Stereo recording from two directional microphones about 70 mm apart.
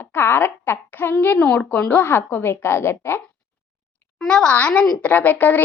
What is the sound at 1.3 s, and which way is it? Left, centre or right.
Speech, centre.